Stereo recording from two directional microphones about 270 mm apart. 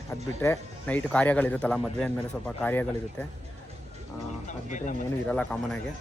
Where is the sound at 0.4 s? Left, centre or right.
Centre.